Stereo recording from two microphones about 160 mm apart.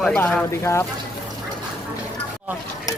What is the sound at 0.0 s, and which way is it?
Speech, 5° left (ahead or behind).